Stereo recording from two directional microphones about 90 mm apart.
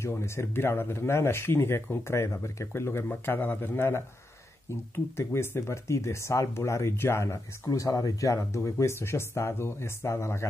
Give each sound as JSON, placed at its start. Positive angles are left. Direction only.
{"t": 0.0, "sound": "speech", "side_deg": 30}